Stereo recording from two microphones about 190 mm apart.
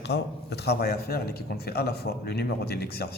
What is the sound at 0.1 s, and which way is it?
A man's voice, 60° left (ahead or behind).